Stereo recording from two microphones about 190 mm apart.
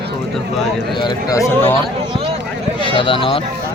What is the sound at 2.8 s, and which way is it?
Speech, 25° left (ahead or behind).